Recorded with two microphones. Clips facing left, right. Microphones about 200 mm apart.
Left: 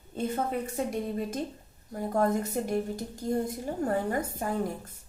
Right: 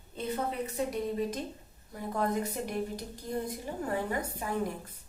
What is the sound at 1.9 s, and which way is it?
A woman's voice, 45° left (ahead or behind).